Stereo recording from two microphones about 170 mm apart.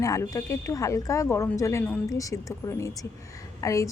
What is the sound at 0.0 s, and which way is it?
Speech, 20° left (ahead or behind).